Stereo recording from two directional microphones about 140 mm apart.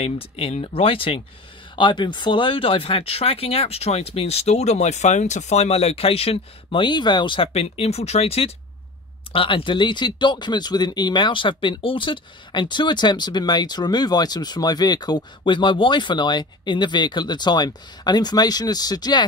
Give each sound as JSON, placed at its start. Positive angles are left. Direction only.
{"t": 0.0, "sound": "speech", "side_deg": 40}